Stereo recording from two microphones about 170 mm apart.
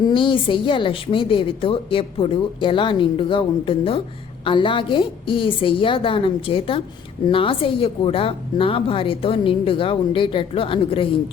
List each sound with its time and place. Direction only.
0.0 s a woman's voice: 30° left (ahead or behind)